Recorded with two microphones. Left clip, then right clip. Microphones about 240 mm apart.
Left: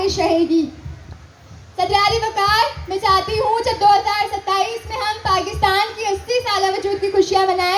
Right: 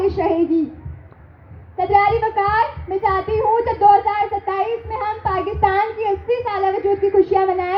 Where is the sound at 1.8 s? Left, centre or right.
Left.